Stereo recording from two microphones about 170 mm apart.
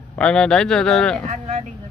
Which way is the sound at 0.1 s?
5° left (ahead or behind).